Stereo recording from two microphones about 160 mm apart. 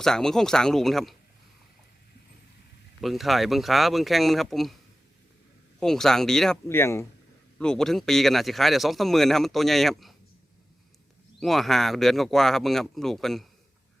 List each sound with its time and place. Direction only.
0.0 s speech: 5° left (ahead or behind)
3.0 s speech: centre (ahead or behind)
5.8 s speech: 5° left (ahead or behind)
6.7 s speech: 15° left (ahead or behind)
7.6 s speech: 5° left (ahead or behind)
11.3 s speech: centre (ahead or behind)